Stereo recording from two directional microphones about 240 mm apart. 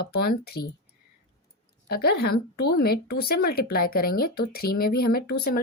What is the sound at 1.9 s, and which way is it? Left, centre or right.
Speech, left.